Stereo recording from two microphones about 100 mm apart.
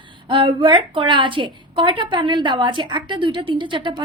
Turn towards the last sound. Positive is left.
turn(degrees=-50)  # may be behind; listen again after turning